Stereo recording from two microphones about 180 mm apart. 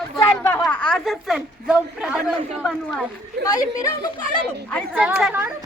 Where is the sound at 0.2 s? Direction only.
10° left (ahead or behind).